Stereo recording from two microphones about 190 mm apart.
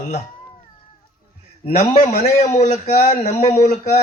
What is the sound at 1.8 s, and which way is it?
A man's voice, 35° left (ahead or behind).